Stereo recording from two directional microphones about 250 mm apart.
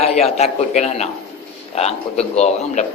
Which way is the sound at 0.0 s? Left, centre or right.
Left.